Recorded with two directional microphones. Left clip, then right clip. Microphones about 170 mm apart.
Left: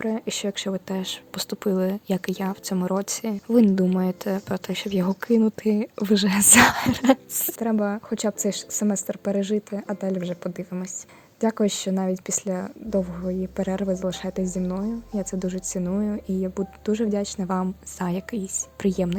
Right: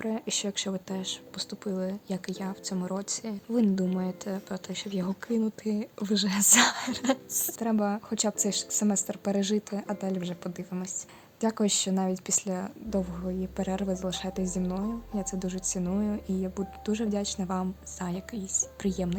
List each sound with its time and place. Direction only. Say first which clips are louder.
0.0 s speech: left 5 dB; 20° left (ahead or behind)
7.7 s a woman's voice: left 4 dB; 15° left (ahead or behind)